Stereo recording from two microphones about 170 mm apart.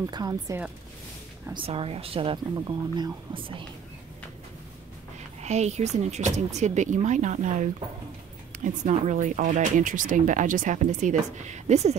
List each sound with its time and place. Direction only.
0.0 s speech: 25° right (ahead or behind)
1.5 s speech: 35° right (ahead or behind)
5.4 s speech: 40° right (ahead or behind)